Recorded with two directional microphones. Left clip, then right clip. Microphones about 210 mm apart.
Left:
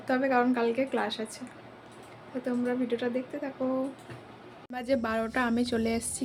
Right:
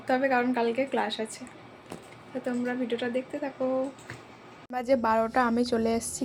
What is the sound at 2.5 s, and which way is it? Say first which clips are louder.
Speech: even; 10° left (ahead or behind).